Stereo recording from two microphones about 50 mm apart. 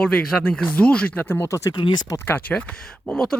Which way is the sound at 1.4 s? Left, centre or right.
Left.